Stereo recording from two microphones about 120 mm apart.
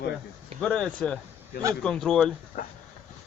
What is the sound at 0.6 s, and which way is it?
Speech, 5° left (ahead or behind).